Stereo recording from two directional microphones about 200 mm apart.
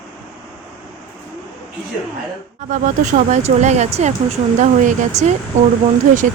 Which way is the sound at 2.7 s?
40° right (ahead or behind).